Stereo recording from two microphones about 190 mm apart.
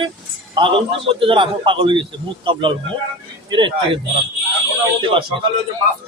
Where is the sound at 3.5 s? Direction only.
25° right (ahead or behind).